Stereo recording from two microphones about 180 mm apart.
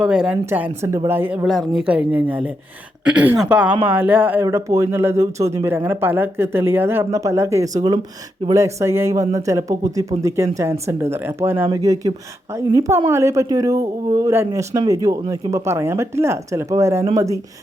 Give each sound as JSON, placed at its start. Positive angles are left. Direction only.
{"t": 0.0, "sound": "a woman's voice", "side_deg": -5}